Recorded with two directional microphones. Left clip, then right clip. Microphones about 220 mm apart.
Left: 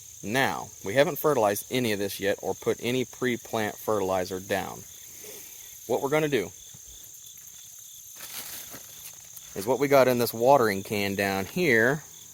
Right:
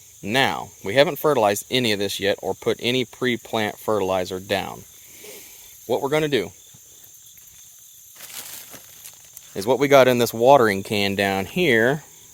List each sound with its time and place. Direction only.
0.2 s speech: 40° right (ahead or behind)
5.9 s speech: 55° right (ahead or behind)
8.2 s a sound: 30° right (ahead or behind)
9.6 s speech: 45° right (ahead or behind)